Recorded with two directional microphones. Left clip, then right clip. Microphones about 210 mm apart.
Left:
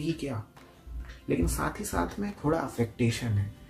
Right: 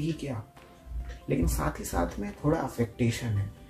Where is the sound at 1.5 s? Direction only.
15° left (ahead or behind).